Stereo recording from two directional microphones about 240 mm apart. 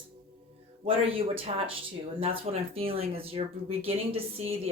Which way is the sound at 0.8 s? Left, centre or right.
Right.